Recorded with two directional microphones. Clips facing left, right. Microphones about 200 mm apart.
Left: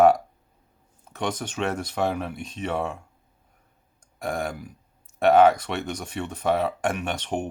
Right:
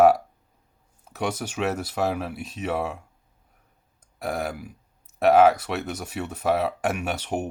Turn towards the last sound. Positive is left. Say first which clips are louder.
# right 1 dB
turn(degrees=-5)  # may be behind; listen again after turning